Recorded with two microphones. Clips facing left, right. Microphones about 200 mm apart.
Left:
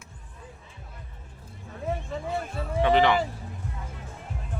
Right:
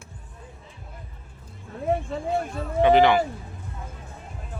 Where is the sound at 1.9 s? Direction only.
50° right (ahead or behind).